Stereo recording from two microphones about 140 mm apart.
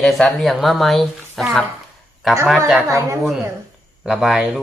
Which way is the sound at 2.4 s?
Centre (ahead or behind).